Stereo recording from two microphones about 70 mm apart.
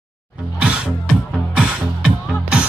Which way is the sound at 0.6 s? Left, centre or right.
Centre.